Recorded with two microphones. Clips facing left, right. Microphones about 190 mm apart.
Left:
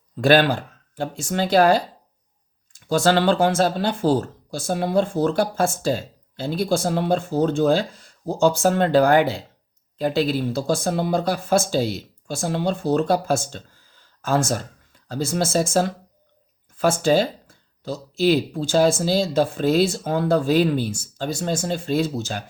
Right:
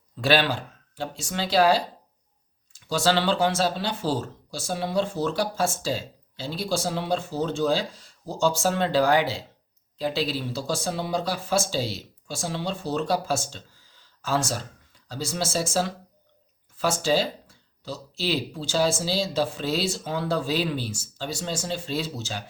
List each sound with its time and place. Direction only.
0.2 s speech: 50° left (ahead or behind)